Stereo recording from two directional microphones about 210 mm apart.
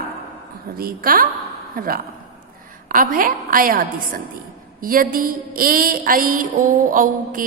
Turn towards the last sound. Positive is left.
turn(degrees=-40)  # may be behind; listen again after turning